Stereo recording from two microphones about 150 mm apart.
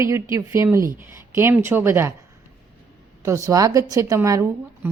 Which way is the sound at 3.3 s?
20° right (ahead or behind).